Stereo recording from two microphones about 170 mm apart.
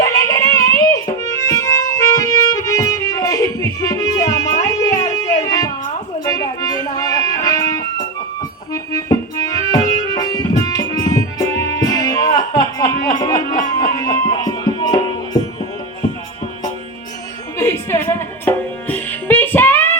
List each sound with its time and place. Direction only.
0.0 s music: 20° left (ahead or behind)
8.7 s accordion: 20° left (ahead or behind)
13.1 s music: 20° left (ahead or behind)
17.6 s music: 15° left (ahead or behind)